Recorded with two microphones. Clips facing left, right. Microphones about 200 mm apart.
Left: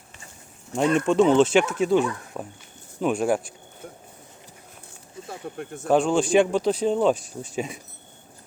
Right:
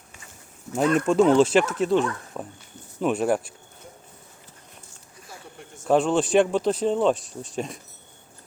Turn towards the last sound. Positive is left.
turn(degrees=0)  # may be behind; listen again after turning